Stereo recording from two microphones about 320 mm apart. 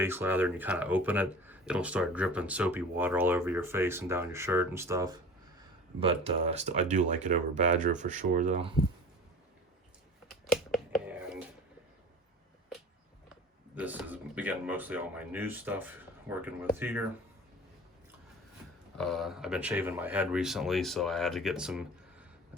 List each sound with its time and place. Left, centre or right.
0.0 s speech: centre
10.4 s finger snapping: centre
13.7 s speech: centre
18.9 s speech: centre